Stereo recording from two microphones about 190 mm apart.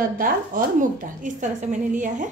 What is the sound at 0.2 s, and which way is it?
A woman's voice, 45° right (ahead or behind).